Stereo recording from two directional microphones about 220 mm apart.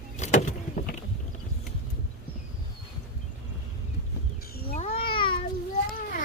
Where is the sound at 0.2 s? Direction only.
35° left (ahead or behind).